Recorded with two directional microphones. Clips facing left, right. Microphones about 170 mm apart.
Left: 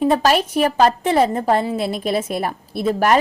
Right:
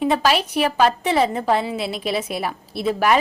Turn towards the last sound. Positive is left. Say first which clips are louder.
# left 2 dB
turn(degrees=45)  # may be behind; listen again after turning